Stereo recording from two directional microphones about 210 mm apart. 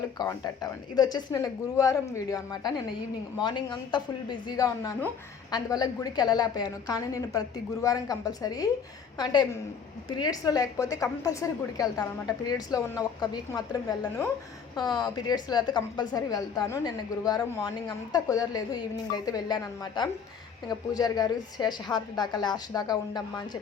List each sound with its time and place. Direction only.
0.2 s a woman's voice: 20° left (ahead or behind)